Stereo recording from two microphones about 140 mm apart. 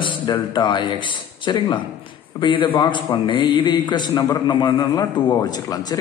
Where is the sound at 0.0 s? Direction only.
35° left (ahead or behind).